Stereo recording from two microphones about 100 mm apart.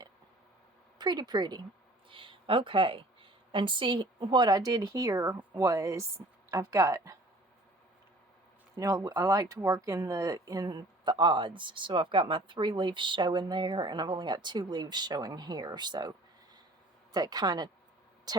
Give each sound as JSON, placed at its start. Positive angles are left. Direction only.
{"t": 0.9, "sound": "a woman's voice", "side_deg": -45}
{"t": 2.0, "sound": "a woman's voice", "side_deg": -60}
{"t": 8.7, "sound": "a woman's voice", "side_deg": -35}